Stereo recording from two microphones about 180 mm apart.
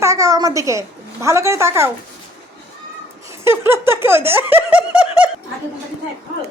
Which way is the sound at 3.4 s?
15° right (ahead or behind).